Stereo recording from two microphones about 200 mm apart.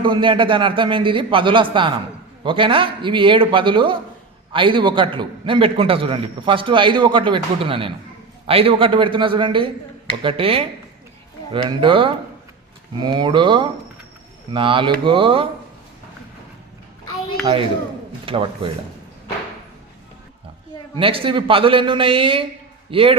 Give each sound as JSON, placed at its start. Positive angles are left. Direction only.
{"t": 0.0, "sound": "a man's voice", "side_deg": -25}
{"t": 17.4, "sound": "a man's voice", "side_deg": -25}
{"t": 20.9, "sound": "a man's voice", "side_deg": -25}